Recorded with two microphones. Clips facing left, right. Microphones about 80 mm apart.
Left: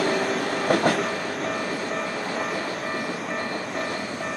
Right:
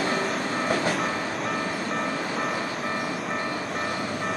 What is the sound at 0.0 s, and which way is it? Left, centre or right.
Train, left.